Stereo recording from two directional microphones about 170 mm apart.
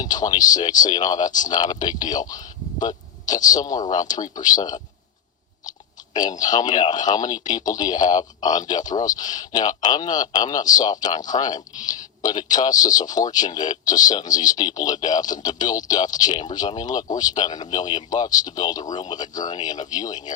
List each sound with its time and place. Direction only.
0.0 s speech: 25° left (ahead or behind)
6.1 s speech: 25° left (ahead or behind)